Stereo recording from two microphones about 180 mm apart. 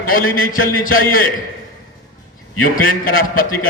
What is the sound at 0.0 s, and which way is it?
Speech, 55° left (ahead or behind).